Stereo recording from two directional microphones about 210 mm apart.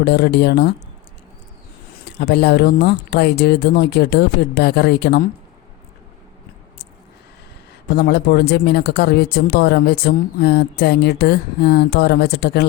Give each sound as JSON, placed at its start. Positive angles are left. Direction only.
{"t": 0.0, "sound": "speech", "side_deg": 50}
{"t": 2.0, "sound": "speech", "side_deg": 50}
{"t": 7.9, "sound": "speech", "side_deg": 50}